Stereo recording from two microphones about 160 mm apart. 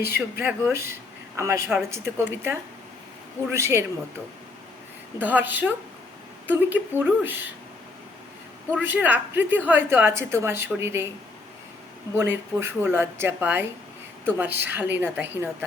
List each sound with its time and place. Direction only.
0.3 s a woman's voice: 15° right (ahead or behind)
5.2 s a woman's voice: 10° right (ahead or behind)
8.7 s a woman's voice: 10° right (ahead or behind)
12.1 s a woman's voice: 15° right (ahead or behind)